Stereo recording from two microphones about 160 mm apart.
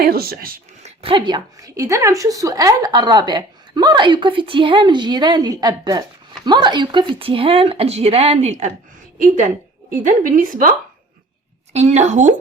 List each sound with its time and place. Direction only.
0.0 s speech: 70° right (ahead or behind)
0.8 s a sound: 45° right (ahead or behind)
1.1 s a woman's voice: 30° right (ahead or behind); by 10.8 s 60° right (ahead or behind)
11.7 s a woman's voice: 45° right (ahead or behind)